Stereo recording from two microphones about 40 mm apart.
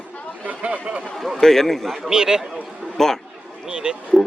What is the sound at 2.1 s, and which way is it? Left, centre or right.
Speech, centre.